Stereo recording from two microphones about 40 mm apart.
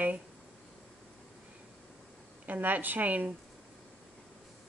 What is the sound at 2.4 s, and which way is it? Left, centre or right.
Speech, right.